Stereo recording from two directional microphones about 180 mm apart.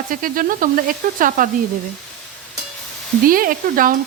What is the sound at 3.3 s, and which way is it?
Speech, 50° right (ahead or behind).